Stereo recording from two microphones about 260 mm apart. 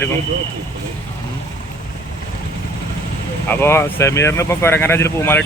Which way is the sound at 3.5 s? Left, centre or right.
Centre.